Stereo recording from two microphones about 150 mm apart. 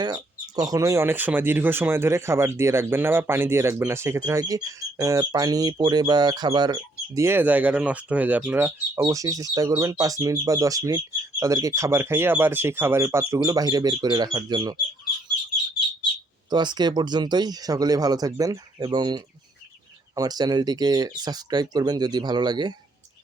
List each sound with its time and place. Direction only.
0.0 s speech: 25° right (ahead or behind)
16.5 s speech: 30° right (ahead or behind)